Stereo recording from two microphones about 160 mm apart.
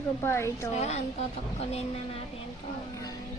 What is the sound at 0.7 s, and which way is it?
Speech, 45° left (ahead or behind).